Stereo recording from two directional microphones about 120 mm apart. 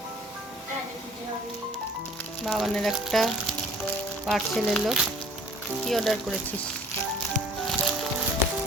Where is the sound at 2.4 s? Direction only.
Centre (ahead or behind).